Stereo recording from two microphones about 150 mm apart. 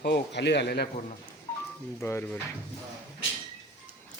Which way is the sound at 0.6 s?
90° left.